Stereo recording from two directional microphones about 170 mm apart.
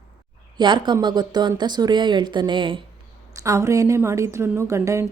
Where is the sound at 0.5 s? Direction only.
25° right (ahead or behind).